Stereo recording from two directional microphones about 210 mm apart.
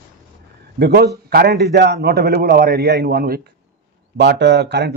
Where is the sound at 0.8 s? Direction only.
50° right (ahead or behind).